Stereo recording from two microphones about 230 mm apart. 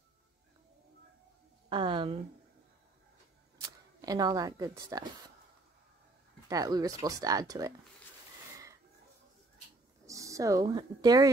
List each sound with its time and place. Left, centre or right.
1.7 s a sound: right
3.6 s speech: centre
6.5 s speech: centre
10.0 s speech: centre